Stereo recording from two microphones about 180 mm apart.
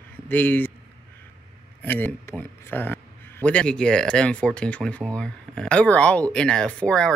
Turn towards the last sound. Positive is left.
turn(degrees=5)  # may be behind; listen again after turning